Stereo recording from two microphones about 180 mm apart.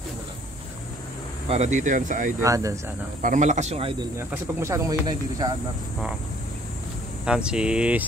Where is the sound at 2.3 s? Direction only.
15° right (ahead or behind).